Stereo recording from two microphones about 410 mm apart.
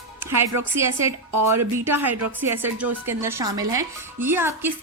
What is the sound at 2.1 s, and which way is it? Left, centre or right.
Speech, right.